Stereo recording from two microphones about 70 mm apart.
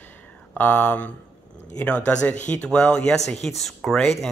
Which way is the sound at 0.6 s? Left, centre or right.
Left.